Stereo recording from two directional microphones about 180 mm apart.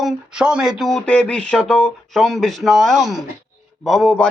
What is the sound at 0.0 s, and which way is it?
Speech, 5° right (ahead or behind).